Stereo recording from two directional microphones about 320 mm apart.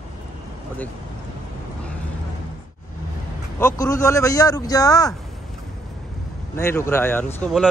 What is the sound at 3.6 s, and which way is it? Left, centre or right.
Speech, centre.